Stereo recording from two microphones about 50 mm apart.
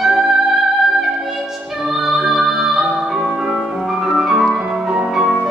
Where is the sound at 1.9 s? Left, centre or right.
Centre.